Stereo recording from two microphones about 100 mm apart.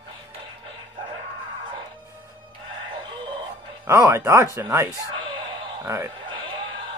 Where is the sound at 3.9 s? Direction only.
25° right (ahead or behind).